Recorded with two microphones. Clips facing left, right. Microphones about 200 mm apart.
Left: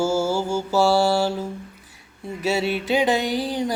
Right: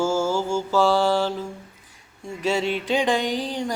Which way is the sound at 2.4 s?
10° left (ahead or behind).